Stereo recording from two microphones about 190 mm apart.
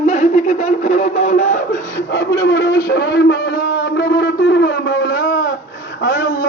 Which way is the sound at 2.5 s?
60° left (ahead or behind).